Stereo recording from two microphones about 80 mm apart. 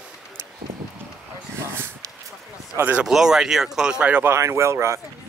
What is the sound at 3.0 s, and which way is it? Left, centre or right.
Speech, centre.